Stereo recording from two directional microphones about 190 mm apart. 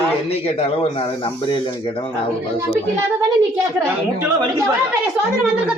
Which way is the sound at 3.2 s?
15° right (ahead or behind).